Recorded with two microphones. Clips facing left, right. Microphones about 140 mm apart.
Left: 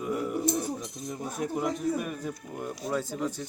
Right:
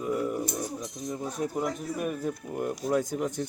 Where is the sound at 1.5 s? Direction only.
Centre (ahead or behind).